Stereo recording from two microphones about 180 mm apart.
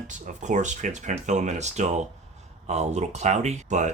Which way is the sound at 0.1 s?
45° right (ahead or behind).